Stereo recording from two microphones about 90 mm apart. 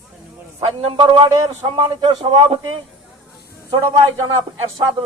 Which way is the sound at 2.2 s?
90° right.